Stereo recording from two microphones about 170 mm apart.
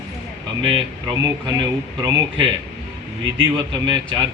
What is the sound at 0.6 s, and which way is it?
Speech, 25° right (ahead or behind).